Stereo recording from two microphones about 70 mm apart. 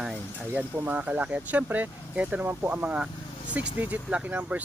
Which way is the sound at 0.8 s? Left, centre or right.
Right.